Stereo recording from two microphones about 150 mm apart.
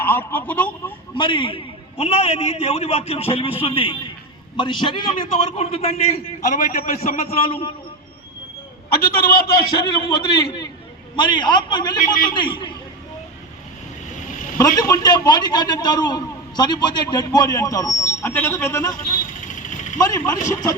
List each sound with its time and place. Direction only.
0.0 s a man's voice: 15° left (ahead or behind)
1.1 s a man's voice: 35° left (ahead or behind)
9.0 s a man's voice: 80° left
9.7 s a man's voice: 30° left (ahead or behind)
14.3 s vehicle: 60° left (ahead or behind)
14.6 s a man's voice: 25° left (ahead or behind)
19.5 s vehicle: 55° left (ahead or behind)
20.0 s a man's voice: 25° left (ahead or behind)